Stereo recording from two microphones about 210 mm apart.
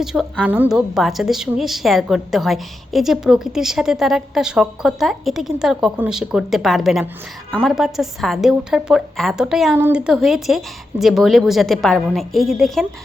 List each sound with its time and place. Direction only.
0.0 s a woman's voice: centre (ahead or behind)